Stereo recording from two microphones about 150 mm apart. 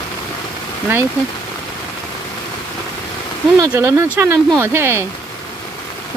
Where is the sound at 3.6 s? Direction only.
20° right (ahead or behind).